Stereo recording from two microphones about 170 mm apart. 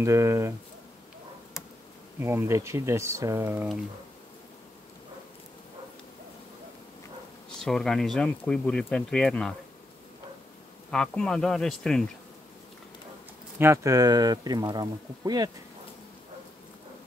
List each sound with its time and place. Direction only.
0.0 s speech: 15° right (ahead or behind)
2.1 s speech: 15° right (ahead or behind)
7.5 s speech: 5° left (ahead or behind)
10.9 s speech: 5° left (ahead or behind)
13.6 s speech: 15° right (ahead or behind)